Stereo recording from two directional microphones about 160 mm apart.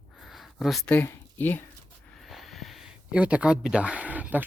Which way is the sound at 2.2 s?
Centre (ahead or behind).